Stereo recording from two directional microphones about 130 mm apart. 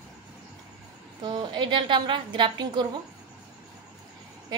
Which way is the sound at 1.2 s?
35° right (ahead or behind).